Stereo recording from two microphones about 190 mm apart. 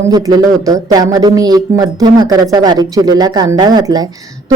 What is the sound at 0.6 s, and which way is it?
Speech, 20° right (ahead or behind).